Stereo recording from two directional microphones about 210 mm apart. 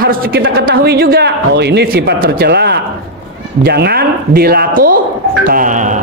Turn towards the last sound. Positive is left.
turn(degrees=-35)  # may be behind; listen again after turning